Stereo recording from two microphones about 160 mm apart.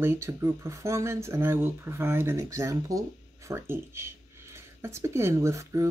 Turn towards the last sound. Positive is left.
turn(degrees=-20)  # may be behind; listen again after turning